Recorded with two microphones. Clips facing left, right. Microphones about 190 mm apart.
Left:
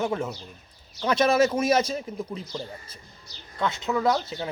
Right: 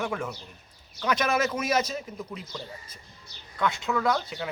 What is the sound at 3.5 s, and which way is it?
Speech, 20° left (ahead or behind).